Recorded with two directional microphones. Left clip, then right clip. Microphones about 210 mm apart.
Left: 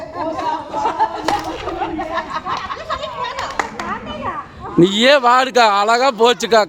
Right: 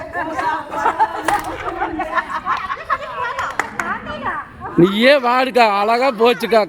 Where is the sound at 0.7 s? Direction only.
Centre (ahead or behind).